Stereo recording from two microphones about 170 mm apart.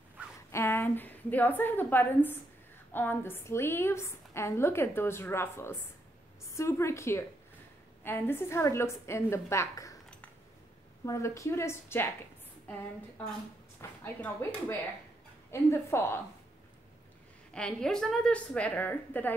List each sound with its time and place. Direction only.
0.5 s a woman's voice: 15° left (ahead or behind)
11.1 s a woman's voice: 15° left (ahead or behind)
13.7 s a woman's voice: 10° left (ahead or behind)
17.6 s a woman's voice: 5° left (ahead or behind)